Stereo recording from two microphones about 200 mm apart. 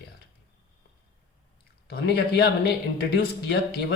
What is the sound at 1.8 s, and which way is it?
Speech, 50° left (ahead or behind).